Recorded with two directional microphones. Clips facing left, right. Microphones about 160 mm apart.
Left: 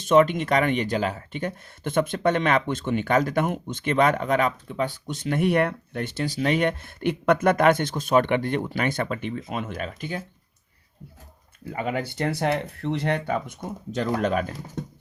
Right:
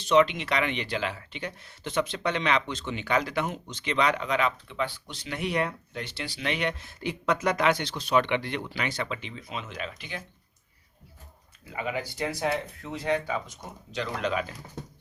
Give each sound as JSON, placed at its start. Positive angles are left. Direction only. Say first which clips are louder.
{"t": 0.0, "sound": "speech", "louder": "left 4 dB", "side_deg": 50}
{"t": 11.7, "sound": "speech", "louder": "left 4 dB", "side_deg": 50}